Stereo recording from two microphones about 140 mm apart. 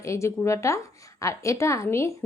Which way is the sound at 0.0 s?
20° left (ahead or behind).